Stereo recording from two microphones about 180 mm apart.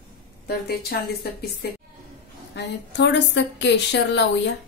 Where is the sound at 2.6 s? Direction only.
75° left (ahead or behind).